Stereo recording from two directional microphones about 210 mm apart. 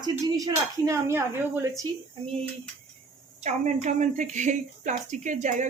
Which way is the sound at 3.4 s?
35° right (ahead or behind).